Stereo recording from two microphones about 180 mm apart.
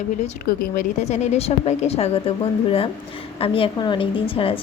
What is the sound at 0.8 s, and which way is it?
A woman's voice, 40° left (ahead or behind).